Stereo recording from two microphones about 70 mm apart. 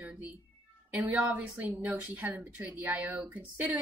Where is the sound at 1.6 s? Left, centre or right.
Centre.